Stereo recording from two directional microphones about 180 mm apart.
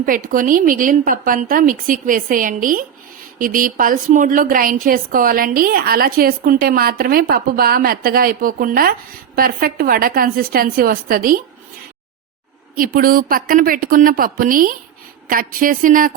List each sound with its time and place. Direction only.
0.0 s a woman's voice: 50° right (ahead or behind)
12.7 s a woman's voice: 50° right (ahead or behind)